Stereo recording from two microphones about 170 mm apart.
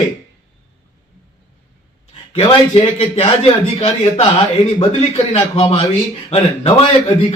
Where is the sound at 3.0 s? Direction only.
35° left (ahead or behind).